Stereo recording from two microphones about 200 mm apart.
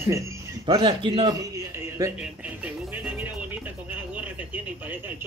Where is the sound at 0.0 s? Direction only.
15° right (ahead or behind).